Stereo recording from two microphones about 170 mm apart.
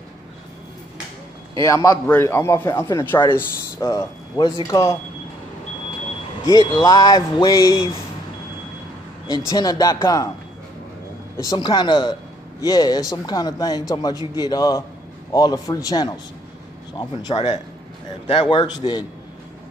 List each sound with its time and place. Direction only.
1.5 s a man's voice: 20° left (ahead or behind)
6.4 s speech: 20° left (ahead or behind)
9.5 s speech: 20° left (ahead or behind)
11.3 s a man's voice: 25° left (ahead or behind)